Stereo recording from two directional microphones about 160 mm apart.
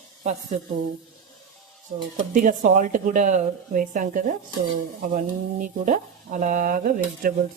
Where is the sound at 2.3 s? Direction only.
55° right (ahead or behind).